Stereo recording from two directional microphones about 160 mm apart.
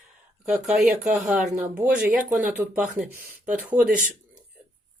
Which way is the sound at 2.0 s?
10° right (ahead or behind).